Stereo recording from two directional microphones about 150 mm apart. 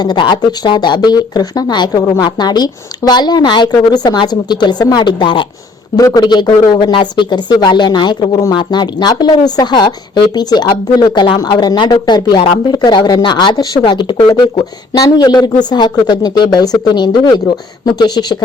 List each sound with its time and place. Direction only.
0.0 s speech: 30° left (ahead or behind)